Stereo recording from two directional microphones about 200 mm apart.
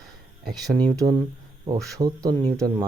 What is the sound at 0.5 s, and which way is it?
Speech, 20° right (ahead or behind).